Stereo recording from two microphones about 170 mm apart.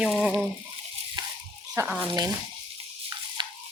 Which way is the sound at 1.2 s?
25° right (ahead or behind).